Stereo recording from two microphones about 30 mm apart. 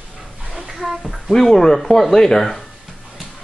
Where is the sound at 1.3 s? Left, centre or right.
Centre.